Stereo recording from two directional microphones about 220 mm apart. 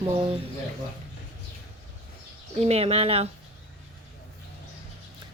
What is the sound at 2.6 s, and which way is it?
Speech, 30° right (ahead or behind).